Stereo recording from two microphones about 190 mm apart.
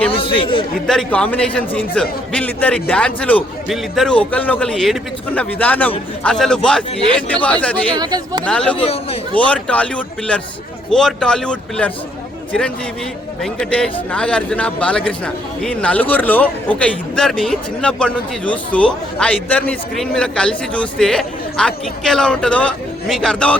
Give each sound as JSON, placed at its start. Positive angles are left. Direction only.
{"t": 0.1, "sound": "chatter", "side_deg": 30}
{"t": 0.9, "sound": "a man's voice", "side_deg": 5}
{"t": 7.9, "sound": "speech", "side_deg": -20}
{"t": 8.4, "sound": "a man's voice", "side_deg": 5}
{"t": 8.7, "sound": "speech", "side_deg": 30}
{"t": 9.3, "sound": "a man's voice", "side_deg": 5}
{"t": 13.4, "sound": "a man's voice", "side_deg": 5}